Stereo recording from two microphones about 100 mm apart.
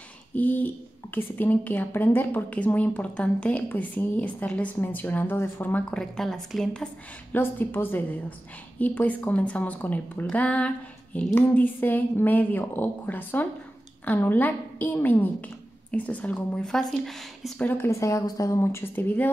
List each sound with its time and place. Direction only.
0.3 s a woman's voice: 15° left (ahead or behind)
7.3 s a woman's voice: 20° left (ahead or behind); by 17.6 s centre (ahead or behind)
17.8 s speech: 30° left (ahead or behind)